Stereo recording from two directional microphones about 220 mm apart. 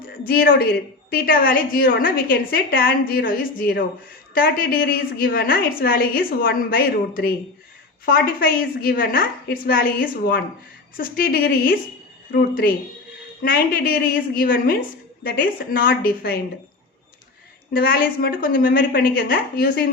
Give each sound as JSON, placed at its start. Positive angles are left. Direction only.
{"t": 0.3, "sound": "a woman's voice", "side_deg": 45}
{"t": 17.7, "sound": "a woman's voice", "side_deg": 45}